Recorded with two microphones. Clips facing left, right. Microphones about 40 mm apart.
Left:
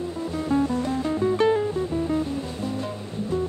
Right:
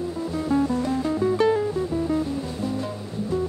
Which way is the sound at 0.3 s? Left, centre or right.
Left.